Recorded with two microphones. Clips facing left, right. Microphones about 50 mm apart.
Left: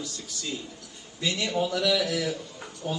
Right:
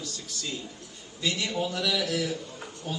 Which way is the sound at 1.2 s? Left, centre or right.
Left.